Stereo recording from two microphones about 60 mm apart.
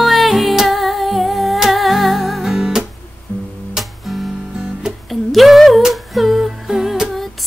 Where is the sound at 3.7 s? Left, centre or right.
Centre.